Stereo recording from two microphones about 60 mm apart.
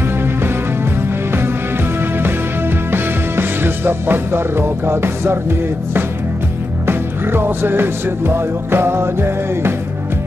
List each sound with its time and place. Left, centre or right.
2.9 s music: right
6.9 s music: right